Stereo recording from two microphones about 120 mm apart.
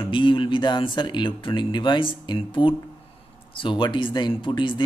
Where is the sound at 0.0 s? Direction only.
45° left (ahead or behind).